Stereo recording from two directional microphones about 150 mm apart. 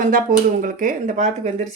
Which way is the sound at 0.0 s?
65° right (ahead or behind).